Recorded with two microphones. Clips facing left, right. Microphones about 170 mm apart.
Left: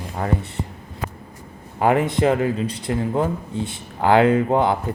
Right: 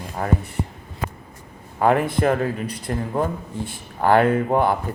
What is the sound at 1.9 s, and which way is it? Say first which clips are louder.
Speech: left 1 dB; 20° left (ahead or behind).